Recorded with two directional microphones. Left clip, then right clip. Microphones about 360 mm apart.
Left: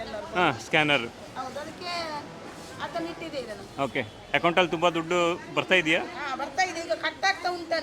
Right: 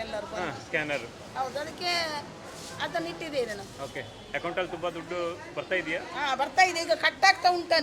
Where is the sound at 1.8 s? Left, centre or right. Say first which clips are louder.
Right 4 dB; right.